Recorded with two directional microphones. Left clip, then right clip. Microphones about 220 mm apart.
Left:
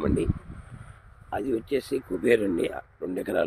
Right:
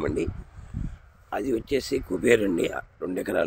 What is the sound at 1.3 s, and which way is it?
Speech, 5° right (ahead or behind).